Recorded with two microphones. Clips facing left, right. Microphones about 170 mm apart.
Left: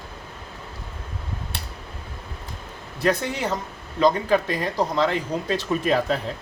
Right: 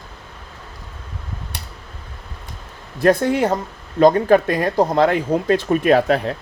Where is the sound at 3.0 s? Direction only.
50° right (ahead or behind).